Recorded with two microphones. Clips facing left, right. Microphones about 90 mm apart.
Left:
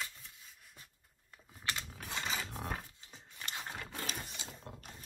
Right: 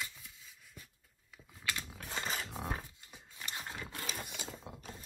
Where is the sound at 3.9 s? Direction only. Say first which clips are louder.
Even; 70° right (ahead or behind).